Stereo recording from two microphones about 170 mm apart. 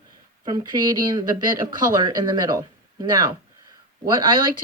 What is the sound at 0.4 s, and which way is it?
A woman's voice, 25° right (ahead or behind).